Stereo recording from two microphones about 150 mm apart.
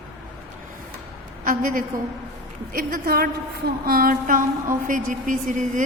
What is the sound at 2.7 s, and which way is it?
A woman's voice, 80° right.